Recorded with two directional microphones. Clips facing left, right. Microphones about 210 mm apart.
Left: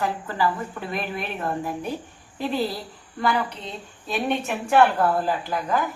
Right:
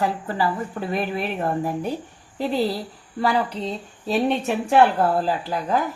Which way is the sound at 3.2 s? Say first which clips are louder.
Right 3 dB; 35° right (ahead or behind).